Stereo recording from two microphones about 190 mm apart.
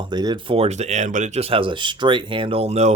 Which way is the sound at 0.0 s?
25° right (ahead or behind).